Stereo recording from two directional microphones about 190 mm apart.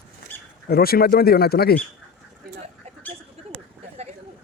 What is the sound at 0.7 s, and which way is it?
Speech, 55° left (ahead or behind).